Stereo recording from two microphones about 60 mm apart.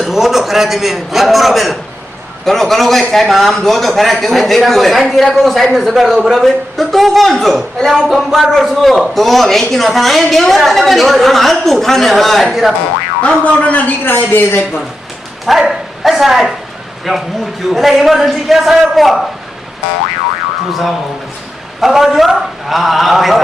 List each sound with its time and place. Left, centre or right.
0.0 s a man's voice: centre
13.2 s a man's voice: left
15.4 s a man's voice: centre
21.8 s a man's voice: centre